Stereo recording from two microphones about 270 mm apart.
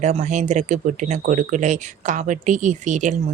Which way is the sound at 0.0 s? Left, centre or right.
Right.